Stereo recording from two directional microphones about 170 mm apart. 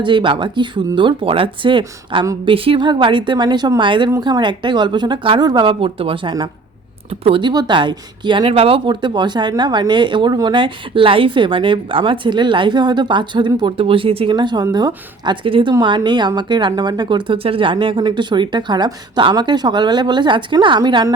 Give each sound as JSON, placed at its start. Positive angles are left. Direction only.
{"t": 0.0, "sound": "speech", "side_deg": -30}